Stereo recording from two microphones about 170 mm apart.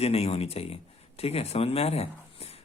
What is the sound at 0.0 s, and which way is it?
Speech, 35° left (ahead or behind).